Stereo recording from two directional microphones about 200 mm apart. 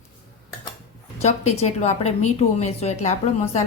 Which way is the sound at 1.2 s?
35° left (ahead or behind).